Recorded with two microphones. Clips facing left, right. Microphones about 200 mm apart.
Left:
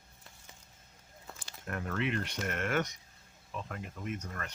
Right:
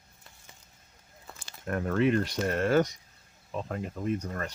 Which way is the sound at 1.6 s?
40° right (ahead or behind).